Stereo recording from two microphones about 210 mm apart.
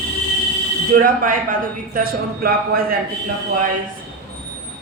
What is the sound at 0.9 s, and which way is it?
A man's voice, 40° right (ahead or behind).